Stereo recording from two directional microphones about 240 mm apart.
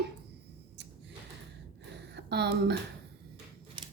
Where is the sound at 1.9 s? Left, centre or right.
Right.